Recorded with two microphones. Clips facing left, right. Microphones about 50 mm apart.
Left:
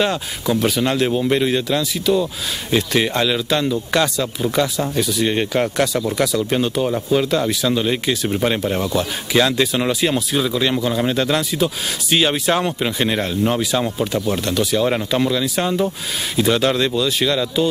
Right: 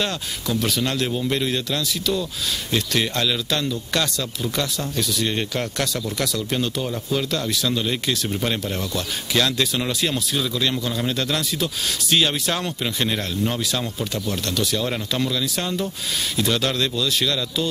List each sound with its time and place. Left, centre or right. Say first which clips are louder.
0.0 s speech: left 6 dB; centre